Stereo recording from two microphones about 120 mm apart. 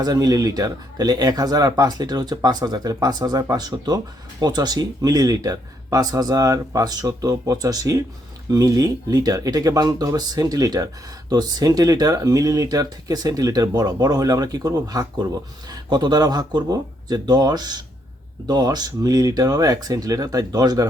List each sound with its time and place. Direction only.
0.0 s speech: 30° right (ahead or behind)